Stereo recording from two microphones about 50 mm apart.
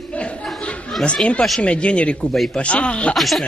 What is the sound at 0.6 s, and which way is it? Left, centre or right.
Chatter, left.